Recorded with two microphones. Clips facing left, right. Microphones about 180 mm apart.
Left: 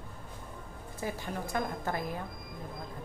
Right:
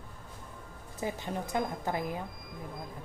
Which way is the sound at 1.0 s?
20° right (ahead or behind).